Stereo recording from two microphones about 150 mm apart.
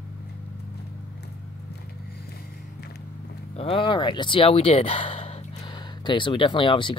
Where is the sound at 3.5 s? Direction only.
40° left (ahead or behind).